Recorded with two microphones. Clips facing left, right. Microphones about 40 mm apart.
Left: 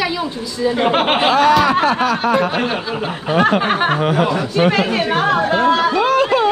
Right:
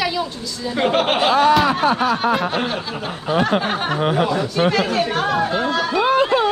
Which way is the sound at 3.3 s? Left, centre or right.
Left.